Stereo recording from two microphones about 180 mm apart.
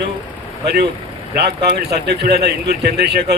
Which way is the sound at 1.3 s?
65° right (ahead or behind).